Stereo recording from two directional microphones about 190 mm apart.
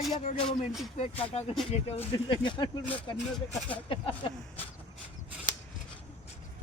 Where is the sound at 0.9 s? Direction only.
35° left (ahead or behind).